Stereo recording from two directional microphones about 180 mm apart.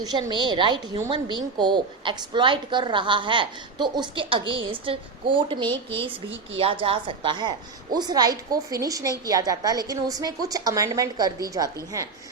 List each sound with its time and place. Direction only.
0.0 s a woman's voice: 25° right (ahead or behind)